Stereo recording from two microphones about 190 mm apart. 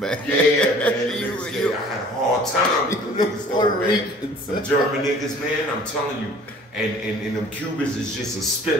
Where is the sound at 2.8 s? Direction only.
20° left (ahead or behind).